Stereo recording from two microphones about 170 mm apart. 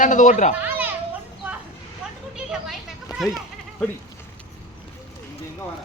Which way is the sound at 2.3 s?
5° right (ahead or behind).